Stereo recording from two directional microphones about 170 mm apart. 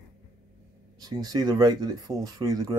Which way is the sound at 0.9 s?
20° right (ahead or behind).